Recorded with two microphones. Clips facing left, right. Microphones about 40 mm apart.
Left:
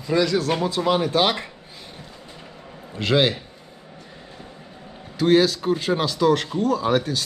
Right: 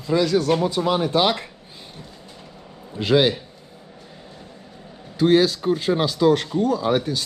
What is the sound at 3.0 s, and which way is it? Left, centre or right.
Speech, left.